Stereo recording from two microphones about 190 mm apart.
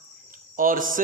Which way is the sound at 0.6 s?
45° right (ahead or behind).